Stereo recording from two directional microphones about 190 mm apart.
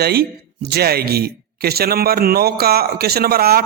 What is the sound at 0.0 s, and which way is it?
Speech, 55° right (ahead or behind).